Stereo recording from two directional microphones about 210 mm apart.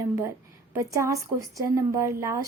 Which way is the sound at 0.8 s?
15° right (ahead or behind).